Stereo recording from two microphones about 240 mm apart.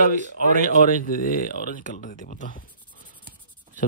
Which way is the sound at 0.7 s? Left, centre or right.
Left.